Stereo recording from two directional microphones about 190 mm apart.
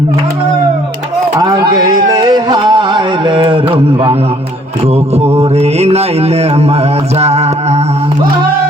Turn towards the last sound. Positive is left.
turn(degrees=-35)  # may be behind; listen again after turning